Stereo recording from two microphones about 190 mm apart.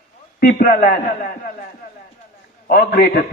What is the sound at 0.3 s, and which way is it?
A man's voice, 50° left (ahead or behind).